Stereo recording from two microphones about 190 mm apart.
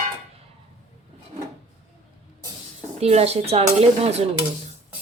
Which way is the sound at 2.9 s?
35° right (ahead or behind).